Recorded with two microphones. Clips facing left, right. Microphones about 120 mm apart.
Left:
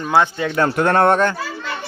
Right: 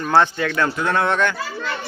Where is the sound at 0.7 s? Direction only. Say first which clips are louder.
Left 8 dB; 55° left (ahead or behind).